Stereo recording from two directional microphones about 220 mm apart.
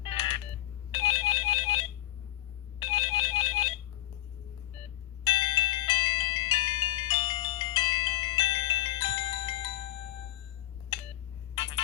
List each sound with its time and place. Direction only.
0.0 s telephone dialing: 25° left (ahead or behind)
0.9 s ringtone: 20° left (ahead or behind)
5.2 s music: 20° left (ahead or behind)
11.5 s music: 25° left (ahead or behind)